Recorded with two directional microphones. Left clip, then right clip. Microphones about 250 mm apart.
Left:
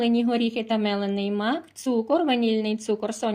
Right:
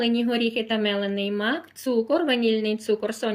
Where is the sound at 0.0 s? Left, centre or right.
Left.